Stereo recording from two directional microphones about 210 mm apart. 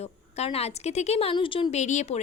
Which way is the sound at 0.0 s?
30° left (ahead or behind).